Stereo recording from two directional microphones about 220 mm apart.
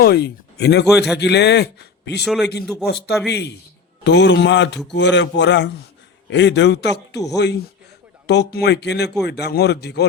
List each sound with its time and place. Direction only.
0.0 s speech: 45° left (ahead or behind)
2.2 s a man's voice: centre (ahead or behind)
2.8 s speech: 45° left (ahead or behind)